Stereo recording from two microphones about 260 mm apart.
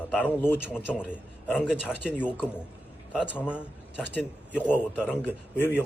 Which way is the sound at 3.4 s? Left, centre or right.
Centre.